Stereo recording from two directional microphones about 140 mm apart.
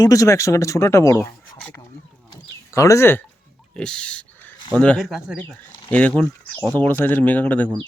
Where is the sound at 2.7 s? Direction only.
20° left (ahead or behind).